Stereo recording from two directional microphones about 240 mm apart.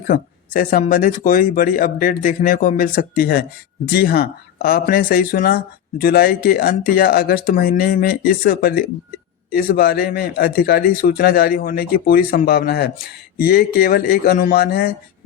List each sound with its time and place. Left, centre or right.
0.1 s speech: left